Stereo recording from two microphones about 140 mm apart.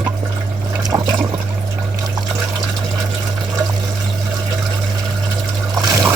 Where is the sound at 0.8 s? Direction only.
30° right (ahead or behind).